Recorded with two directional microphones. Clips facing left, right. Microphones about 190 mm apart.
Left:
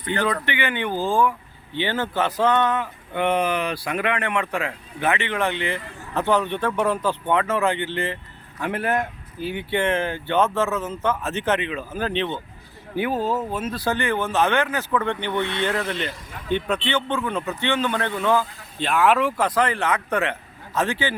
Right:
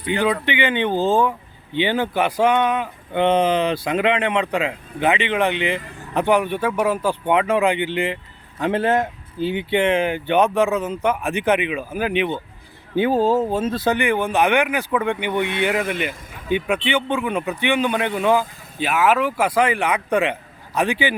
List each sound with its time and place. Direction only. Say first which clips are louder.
0.0 s speech: right 3 dB; 15° right (ahead or behind)
13.0 s speech: right 6 dB; 30° right (ahead or behind)